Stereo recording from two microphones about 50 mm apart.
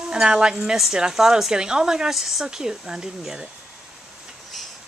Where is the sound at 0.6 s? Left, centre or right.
Centre.